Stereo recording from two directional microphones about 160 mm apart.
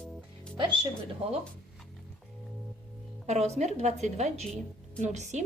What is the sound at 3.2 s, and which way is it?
A woman's voice, 45° right (ahead or behind).